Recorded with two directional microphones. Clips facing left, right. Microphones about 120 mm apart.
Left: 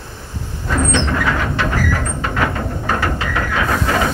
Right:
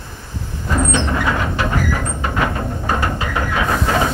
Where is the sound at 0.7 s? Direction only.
10° right (ahead or behind).